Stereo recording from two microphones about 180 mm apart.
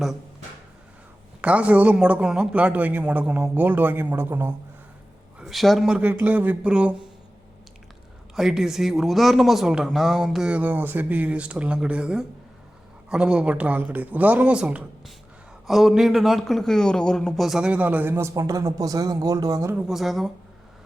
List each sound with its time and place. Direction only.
1.4 s a man's voice: 5° right (ahead or behind)
5.4 s speech: centre (ahead or behind)
8.4 s a man's voice: centre (ahead or behind); by 19.7 s 20° right (ahead or behind)
19.7 s speech: centre (ahead or behind)